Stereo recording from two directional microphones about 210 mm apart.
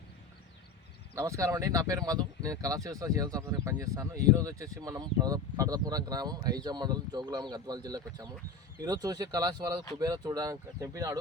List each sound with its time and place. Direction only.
1.1 s speech: 15° right (ahead or behind)